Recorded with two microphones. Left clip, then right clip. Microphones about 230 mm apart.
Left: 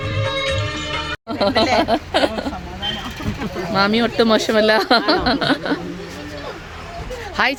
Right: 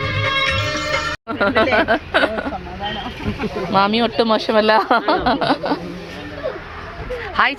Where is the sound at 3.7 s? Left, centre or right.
Centre.